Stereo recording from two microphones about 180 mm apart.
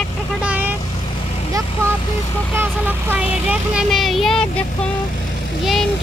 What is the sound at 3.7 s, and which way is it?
Speech, centre (ahead or behind).